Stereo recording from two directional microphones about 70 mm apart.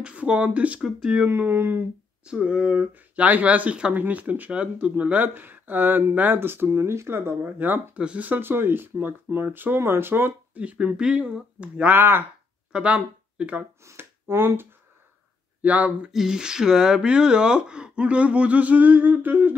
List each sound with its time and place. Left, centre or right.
0.0 s speech: centre
0.7 s speech: centre
1.2 s speech: right
2.2 s speech: centre; by 10.6 s right
10.6 s speech: centre
12.0 s speech: right
12.7 s speech: centre
13.8 s speech: right
15.6 s speech: centre
16.1 s speech: centre; by 19.5 s right